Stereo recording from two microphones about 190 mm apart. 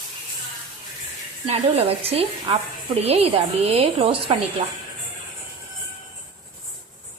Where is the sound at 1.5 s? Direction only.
30° right (ahead or behind).